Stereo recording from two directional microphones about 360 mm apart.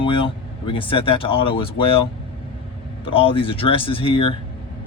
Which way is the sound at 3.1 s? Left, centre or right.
Centre.